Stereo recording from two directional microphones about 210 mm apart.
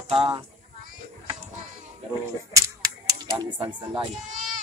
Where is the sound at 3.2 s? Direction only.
20° right (ahead or behind).